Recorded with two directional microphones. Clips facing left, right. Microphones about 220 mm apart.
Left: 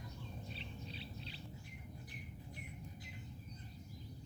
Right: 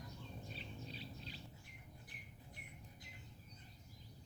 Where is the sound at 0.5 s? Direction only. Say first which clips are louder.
Left 1 dB; 45° right (ahead or behind).